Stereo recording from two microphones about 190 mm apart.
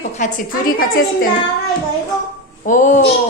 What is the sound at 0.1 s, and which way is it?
A woman's voice, 40° left (ahead or behind).